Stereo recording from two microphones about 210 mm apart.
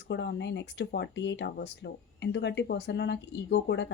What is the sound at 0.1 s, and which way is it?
Speech, 55° left (ahead or behind).